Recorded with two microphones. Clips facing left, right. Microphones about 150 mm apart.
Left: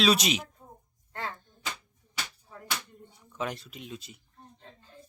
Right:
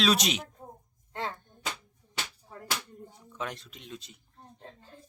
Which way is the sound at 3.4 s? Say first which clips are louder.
Left 3 dB; 5° left (ahead or behind).